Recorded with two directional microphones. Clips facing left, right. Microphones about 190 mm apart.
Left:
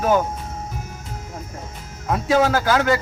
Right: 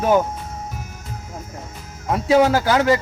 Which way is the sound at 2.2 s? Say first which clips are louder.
Right 3 dB; 20° right (ahead or behind).